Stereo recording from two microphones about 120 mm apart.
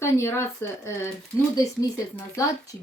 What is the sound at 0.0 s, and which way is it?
Speech, 20° left (ahead or behind).